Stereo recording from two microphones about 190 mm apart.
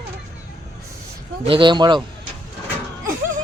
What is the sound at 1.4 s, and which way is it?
Speech, 25° right (ahead or behind).